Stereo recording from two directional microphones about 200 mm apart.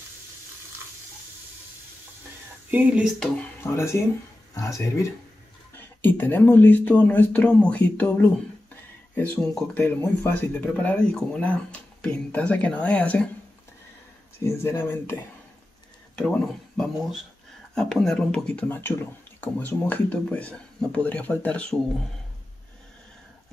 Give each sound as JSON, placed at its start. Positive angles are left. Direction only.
{"t": 2.7, "sound": "speech", "side_deg": -5}
{"t": 14.4, "sound": "speech", "side_deg": 15}
{"t": 16.2, "sound": "speech", "side_deg": 0}